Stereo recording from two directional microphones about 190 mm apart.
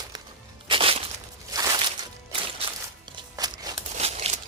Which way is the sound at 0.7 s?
30° right (ahead or behind).